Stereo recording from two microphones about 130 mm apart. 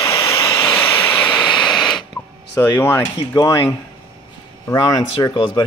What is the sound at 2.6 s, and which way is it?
Speech, 15° left (ahead or behind).